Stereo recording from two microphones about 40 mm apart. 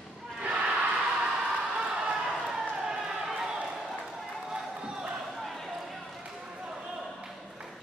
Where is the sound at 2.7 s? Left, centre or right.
Centre.